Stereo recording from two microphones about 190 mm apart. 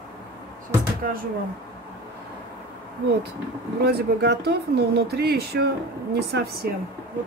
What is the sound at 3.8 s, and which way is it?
Speech, 60° right (ahead or behind).